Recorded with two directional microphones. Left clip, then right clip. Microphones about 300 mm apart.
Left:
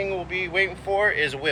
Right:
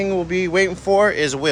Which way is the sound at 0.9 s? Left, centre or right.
Right.